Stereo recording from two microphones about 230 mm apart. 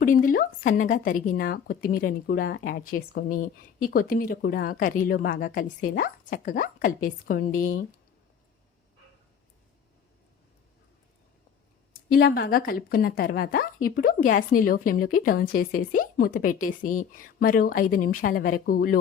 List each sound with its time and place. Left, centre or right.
0.0 s a woman's voice: left
12.0 s a woman's voice: left